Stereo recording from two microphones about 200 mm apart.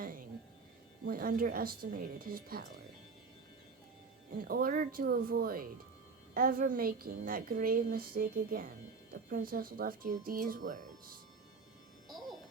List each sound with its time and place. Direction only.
1.0 s a woman's voice: 45° right (ahead or behind)
4.4 s a woman's voice: 45° right (ahead or behind)
12.0 s music: centre (ahead or behind)